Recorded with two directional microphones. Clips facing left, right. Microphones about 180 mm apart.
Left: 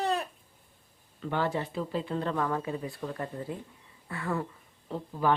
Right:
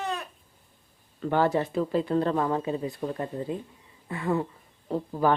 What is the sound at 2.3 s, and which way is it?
Speech, 25° right (ahead or behind).